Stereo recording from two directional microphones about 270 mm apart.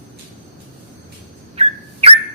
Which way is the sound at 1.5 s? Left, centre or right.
Right.